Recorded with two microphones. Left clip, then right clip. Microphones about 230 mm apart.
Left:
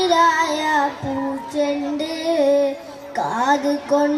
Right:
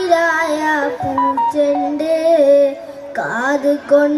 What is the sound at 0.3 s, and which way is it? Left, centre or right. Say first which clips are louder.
Child singing: right 2 dB; right.